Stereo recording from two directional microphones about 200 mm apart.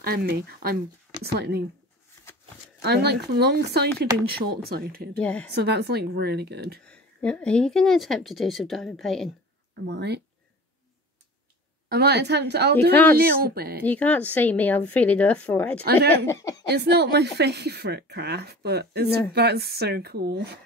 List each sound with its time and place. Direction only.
0.0 s speech: 50° right (ahead or behind)
2.8 s speech: 55° right (ahead or behind)
5.1 s a woman's voice: 5° left (ahead or behind)
5.5 s speech: 55° right (ahead or behind)
6.9 s speech: 5° left (ahead or behind)
9.8 s speech: 55° right (ahead or behind)
11.9 s speech: 55° right (ahead or behind)
13.8 s a woman's voice: 5° left (ahead or behind)
15.8 s speech: 50° right (ahead or behind)
16.3 s a woman's voice: 15° left (ahead or behind)
16.6 s speech: 55° right (ahead or behind)